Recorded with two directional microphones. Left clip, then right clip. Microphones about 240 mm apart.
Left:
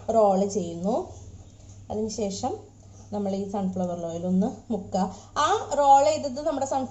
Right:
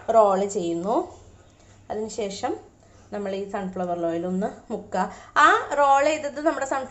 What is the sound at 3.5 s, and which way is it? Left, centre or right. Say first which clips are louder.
A woman's voice: right 2 dB; right.